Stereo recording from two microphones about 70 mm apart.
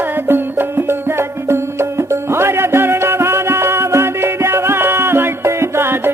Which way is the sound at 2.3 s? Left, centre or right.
Right.